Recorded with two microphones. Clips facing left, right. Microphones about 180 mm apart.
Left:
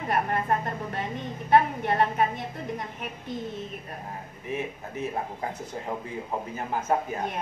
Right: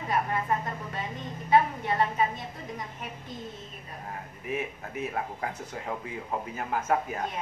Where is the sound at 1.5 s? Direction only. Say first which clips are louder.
Left 2 dB; 65° left (ahead or behind).